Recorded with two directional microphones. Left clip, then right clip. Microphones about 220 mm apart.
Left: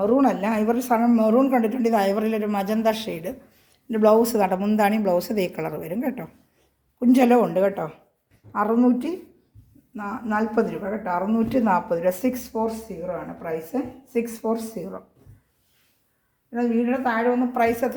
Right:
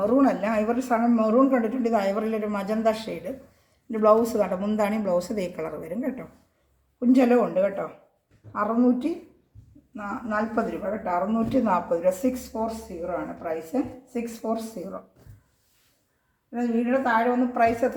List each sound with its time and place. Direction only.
0.0 s speech: 35° left (ahead or behind)
14.1 s speech: 45° left (ahead or behind)
16.5 s speech: 50° left (ahead or behind)